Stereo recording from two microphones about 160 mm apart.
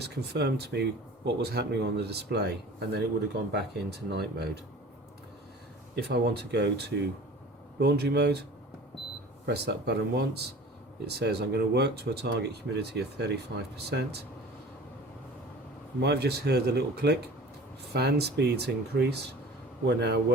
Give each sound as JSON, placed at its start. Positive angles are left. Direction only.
{"t": 0.0, "sound": "speech", "side_deg": -90}
{"t": 3.5, "sound": "speech", "side_deg": -90}
{"t": 6.0, "sound": "speech", "side_deg": -90}
{"t": 9.5, "sound": "speech", "side_deg": -90}
{"t": 16.0, "sound": "speech", "side_deg": -90}